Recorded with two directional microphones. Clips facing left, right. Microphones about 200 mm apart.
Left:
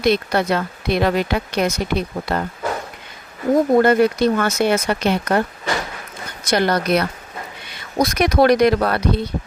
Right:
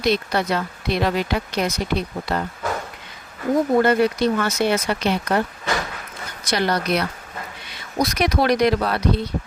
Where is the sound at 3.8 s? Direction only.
50° left (ahead or behind).